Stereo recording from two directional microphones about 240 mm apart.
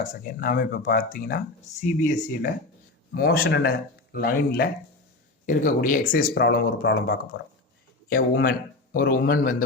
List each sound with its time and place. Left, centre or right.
0.0 s speech: left